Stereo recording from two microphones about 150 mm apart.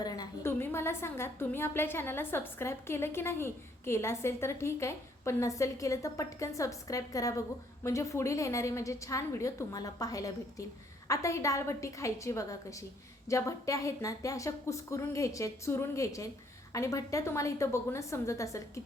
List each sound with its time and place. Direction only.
0.0 s a woman's voice: 20° left (ahead or behind)